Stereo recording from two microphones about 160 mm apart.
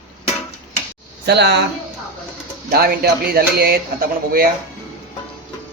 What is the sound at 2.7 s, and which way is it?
Speech, 70° right (ahead or behind).